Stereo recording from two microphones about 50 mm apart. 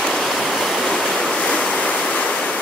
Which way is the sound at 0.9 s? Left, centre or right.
Centre.